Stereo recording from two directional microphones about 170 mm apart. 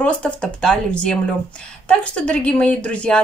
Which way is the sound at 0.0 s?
5° left (ahead or behind).